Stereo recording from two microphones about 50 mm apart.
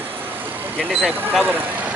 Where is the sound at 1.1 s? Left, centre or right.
Right.